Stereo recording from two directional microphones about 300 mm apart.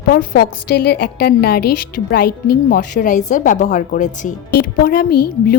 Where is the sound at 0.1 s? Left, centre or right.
Left.